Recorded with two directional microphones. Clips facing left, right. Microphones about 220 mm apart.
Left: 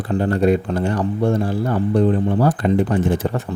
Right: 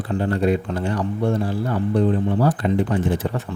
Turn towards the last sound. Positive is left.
turn(degrees=45)  # may be behind; listen again after turning